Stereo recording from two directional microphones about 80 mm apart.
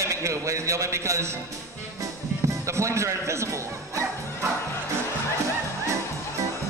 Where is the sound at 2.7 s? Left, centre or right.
Right.